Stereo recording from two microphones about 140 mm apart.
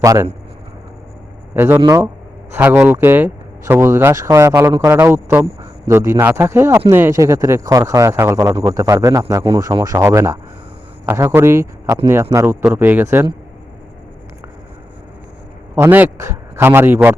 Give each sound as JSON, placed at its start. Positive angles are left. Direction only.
{"t": 0.0, "sound": "speech", "side_deg": -25}
{"t": 1.5, "sound": "a man's voice", "side_deg": -15}
{"t": 15.7, "sound": "a man's voice", "side_deg": -15}